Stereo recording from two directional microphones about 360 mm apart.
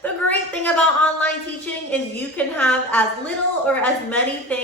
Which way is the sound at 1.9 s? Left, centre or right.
Centre.